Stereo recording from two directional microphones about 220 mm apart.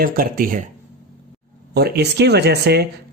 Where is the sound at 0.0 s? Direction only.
40° right (ahead or behind).